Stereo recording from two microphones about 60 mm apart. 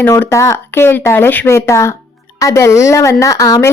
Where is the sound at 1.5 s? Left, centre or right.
Left.